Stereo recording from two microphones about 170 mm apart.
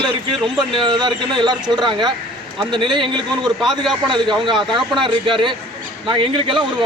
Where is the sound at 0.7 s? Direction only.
30° right (ahead or behind).